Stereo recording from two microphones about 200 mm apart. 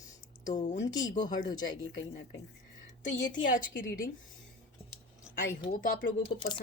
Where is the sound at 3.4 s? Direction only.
40° left (ahead or behind).